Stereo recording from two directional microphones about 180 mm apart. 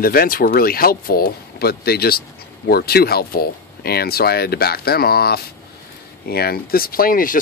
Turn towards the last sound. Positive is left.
turn(degrees=50)  # may be behind; listen again after turning